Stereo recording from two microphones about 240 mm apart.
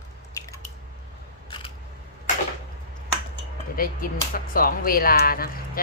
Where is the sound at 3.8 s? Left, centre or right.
Left.